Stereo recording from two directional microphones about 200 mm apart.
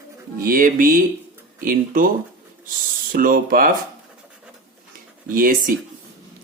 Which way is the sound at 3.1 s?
45° right (ahead or behind).